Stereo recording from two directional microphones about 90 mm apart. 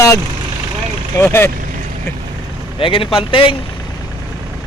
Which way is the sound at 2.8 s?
80° left.